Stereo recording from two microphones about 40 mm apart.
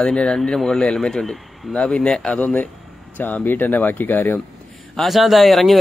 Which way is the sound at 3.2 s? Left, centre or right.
Left.